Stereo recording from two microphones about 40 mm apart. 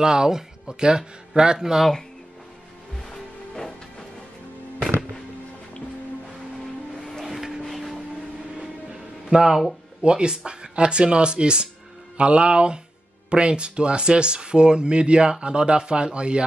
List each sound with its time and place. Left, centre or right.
0.0 s speech: centre
7.0 s music: centre
7.2 s a sound: centre
9.3 s speech: centre